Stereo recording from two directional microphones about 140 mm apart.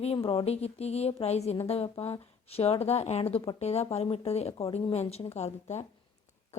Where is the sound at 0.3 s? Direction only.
45° left (ahead or behind).